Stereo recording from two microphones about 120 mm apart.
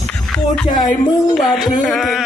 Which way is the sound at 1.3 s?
5° left (ahead or behind).